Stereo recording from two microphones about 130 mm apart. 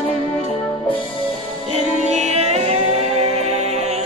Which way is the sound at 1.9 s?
60° right (ahead or behind).